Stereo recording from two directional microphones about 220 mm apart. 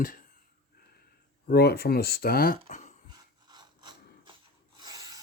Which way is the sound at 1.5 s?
45° left (ahead or behind).